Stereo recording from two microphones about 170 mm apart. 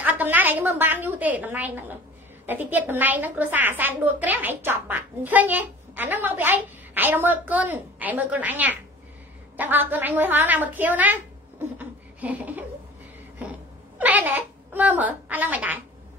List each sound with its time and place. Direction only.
0.0 s a woman's voice: 10° right (ahead or behind)
11.8 s a sound: 10° right (ahead or behind)
13.9 s a woman's voice: 10° right (ahead or behind)